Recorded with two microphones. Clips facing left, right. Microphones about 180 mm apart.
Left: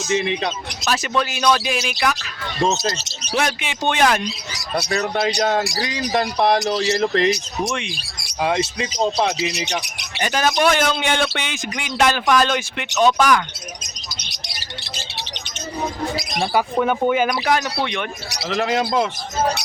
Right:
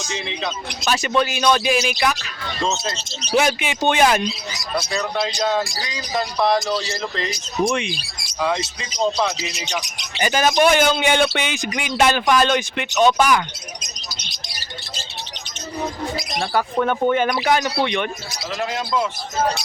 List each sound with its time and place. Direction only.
0.9 s speech: centre (ahead or behind)
3.3 s speech: 5° right (ahead or behind)
4.8 s speech: 60° left (ahead or behind)
6.9 s a man's voice: 65° left (ahead or behind)
7.6 s speech: centre (ahead or behind)
10.2 s speech: 5° right (ahead or behind)
16.4 s speech: 10° left (ahead or behind)
18.3 s a man's voice: 80° left